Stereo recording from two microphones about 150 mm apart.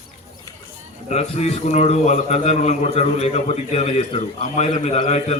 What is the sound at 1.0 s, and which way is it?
A man's voice, 45° left (ahead or behind).